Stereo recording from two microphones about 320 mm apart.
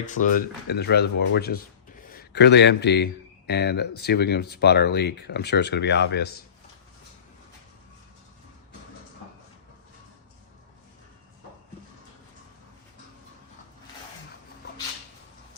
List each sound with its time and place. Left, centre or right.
0.1 s a man's voice: left